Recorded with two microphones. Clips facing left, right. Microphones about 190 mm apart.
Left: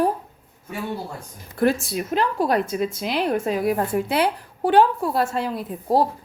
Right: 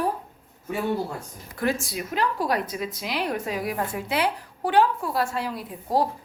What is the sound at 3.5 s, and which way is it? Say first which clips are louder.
Speech: left 6 dB; 50° left (ahead or behind).